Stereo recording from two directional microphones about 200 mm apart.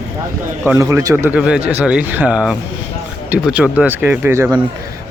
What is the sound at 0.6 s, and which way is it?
Speech, 15° right (ahead or behind).